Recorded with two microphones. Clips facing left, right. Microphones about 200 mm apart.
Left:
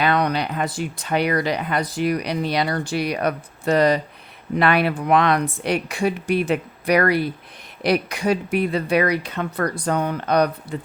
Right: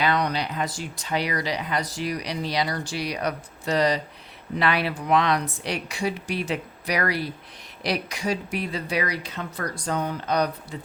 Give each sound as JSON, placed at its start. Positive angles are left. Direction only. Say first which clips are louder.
{"t": 0.0, "sound": "speech", "louder": "left 4 dB", "side_deg": 55}